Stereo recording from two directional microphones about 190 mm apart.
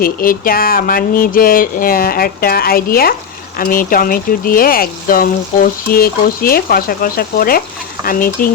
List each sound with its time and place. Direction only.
0.0 s speech: 50° left (ahead or behind)